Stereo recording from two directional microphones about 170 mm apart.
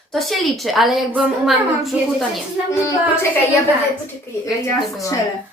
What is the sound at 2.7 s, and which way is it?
Speech, 15° left (ahead or behind).